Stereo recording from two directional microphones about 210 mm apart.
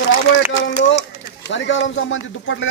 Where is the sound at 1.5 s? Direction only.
60° left (ahead or behind).